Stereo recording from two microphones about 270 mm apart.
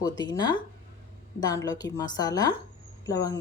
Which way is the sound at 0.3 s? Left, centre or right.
Centre.